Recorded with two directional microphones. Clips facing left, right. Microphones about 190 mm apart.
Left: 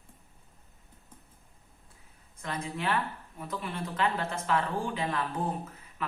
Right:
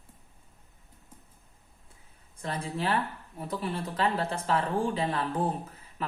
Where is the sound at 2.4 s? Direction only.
30° right (ahead or behind).